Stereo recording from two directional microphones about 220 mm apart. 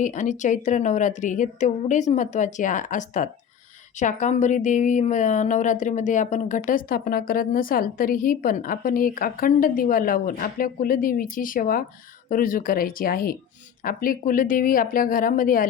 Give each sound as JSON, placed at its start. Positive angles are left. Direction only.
{"t": 0.0, "sound": "speech", "side_deg": 35}